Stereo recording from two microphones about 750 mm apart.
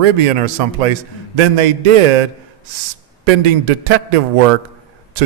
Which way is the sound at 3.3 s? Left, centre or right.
Right.